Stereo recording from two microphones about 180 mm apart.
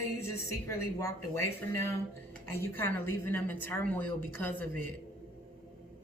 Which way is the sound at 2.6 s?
15° left (ahead or behind).